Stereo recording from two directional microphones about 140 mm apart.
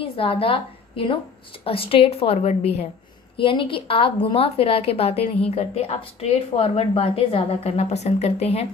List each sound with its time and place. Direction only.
0.0 s a woman's voice: 40° left (ahead or behind)
3.3 s a woman's voice: 40° left (ahead or behind)